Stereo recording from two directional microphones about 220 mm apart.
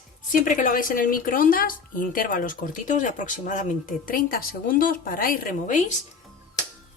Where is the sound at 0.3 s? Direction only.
35° left (ahead or behind).